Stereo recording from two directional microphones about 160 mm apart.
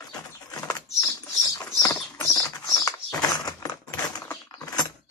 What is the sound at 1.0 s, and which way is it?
Bird, 20° left (ahead or behind).